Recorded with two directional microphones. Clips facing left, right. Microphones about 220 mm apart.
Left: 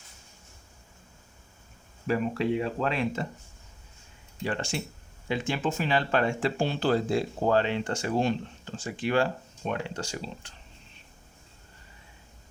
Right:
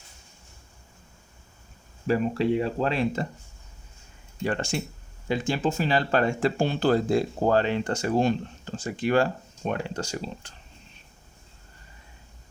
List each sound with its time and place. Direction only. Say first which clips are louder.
2.0 s speech: right 3 dB; 35° right (ahead or behind)
4.4 s speech: right 3 dB; 45° right (ahead or behind)